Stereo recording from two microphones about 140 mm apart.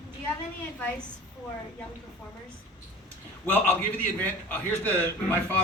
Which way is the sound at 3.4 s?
10° left (ahead or behind).